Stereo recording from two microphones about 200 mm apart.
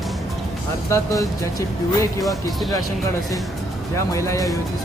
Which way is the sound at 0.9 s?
15° left (ahead or behind).